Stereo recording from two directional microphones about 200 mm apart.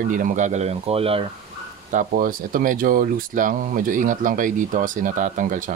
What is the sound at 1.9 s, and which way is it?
Speech, 45° right (ahead or behind).